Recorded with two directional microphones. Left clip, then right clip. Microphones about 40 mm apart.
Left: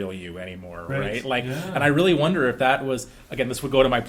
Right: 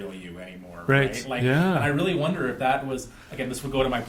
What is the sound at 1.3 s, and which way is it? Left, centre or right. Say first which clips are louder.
Speech: right 3 dB; left.